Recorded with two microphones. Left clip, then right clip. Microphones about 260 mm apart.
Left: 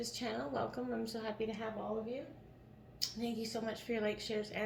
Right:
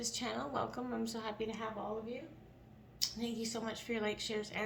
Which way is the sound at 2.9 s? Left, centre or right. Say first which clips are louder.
Right 1 dB; right.